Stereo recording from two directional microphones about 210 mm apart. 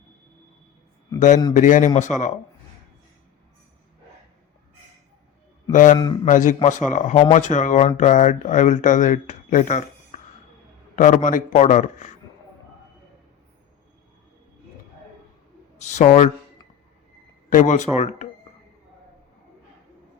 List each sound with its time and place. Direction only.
1.5 s speech: 35° left (ahead or behind)
5.7 s speech: 40° left (ahead or behind)
15.8 s speech: 35° left (ahead or behind)
17.5 s speech: 35° left (ahead or behind)